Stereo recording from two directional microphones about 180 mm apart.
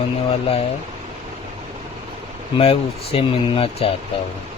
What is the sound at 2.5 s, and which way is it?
Speech, 30° left (ahead or behind).